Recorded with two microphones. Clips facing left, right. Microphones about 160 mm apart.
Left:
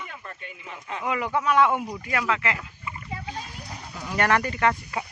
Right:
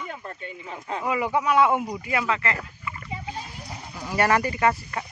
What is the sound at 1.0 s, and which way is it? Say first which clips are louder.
Speech: right 1 dB; 10° right (ahead or behind).